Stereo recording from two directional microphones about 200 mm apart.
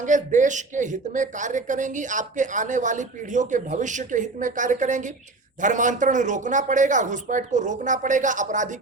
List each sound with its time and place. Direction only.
0.0 s speech: 40° right (ahead or behind)